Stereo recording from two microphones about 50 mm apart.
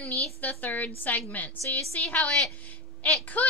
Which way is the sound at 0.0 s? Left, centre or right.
Left.